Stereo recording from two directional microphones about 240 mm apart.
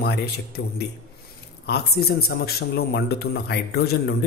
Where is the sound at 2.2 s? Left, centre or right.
Left.